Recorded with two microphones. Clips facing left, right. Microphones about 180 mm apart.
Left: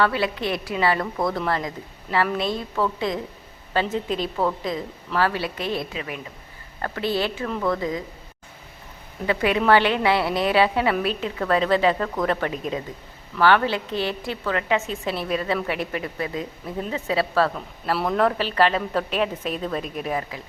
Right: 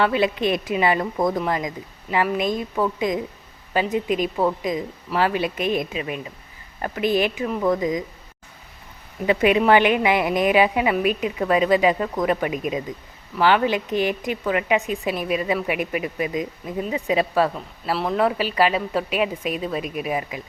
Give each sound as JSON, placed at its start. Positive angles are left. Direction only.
{"t": 0.0, "sound": "a woman's voice", "side_deg": -20}
{"t": 9.2, "sound": "a woman's voice", "side_deg": -20}
{"t": 17.9, "sound": "a woman's voice", "side_deg": 0}